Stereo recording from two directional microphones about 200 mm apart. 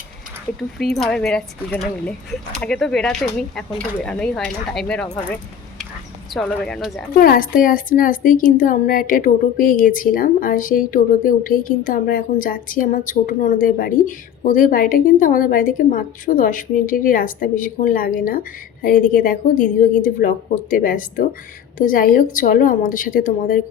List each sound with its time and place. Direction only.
0.8 s speech: centre (ahead or behind)
6.3 s speech: 5° left (ahead or behind)
7.1 s speech: 45° left (ahead or behind)